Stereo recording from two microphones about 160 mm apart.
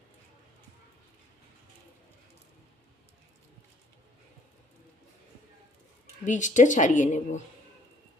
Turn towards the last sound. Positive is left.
turn(degrees=50)  # may be behind; listen again after turning